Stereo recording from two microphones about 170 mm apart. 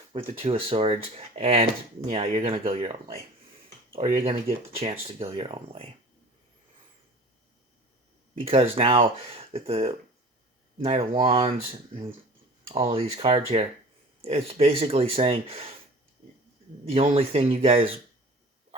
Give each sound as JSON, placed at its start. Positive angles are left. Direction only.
{"t": 0.1, "sound": "speech", "side_deg": -35}
{"t": 4.8, "sound": "speech", "side_deg": -35}
{"t": 8.4, "sound": "speech", "side_deg": -35}
{"t": 12.6, "sound": "speech", "side_deg": -35}
{"t": 16.8, "sound": "speech", "side_deg": -35}